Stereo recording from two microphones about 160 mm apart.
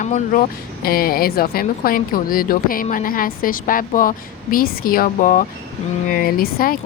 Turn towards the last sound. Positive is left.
turn(degrees=65)  # may be behind; listen again after turning